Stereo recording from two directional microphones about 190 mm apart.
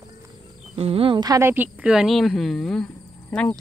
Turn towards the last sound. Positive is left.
turn(degrees=5)  # may be behind; listen again after turning